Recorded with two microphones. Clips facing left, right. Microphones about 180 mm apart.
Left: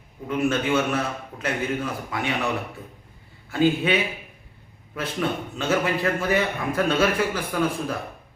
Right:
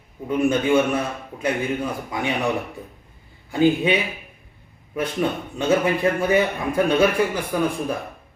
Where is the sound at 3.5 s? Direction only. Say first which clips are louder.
Right 3 dB; 15° right (ahead or behind).